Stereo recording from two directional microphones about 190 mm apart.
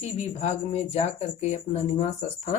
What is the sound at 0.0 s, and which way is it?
A woman's voice, 35° left (ahead or behind).